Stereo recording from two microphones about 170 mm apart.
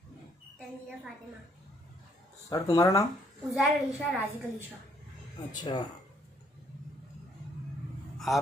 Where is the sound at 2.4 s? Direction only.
20° left (ahead or behind).